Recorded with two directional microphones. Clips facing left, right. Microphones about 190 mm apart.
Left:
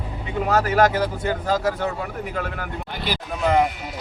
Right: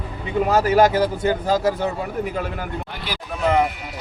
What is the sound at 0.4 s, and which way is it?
Speech, 10° right (ahead or behind).